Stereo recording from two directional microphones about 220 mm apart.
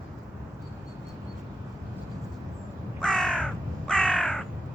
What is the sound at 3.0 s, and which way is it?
Crow, 5° left (ahead or behind).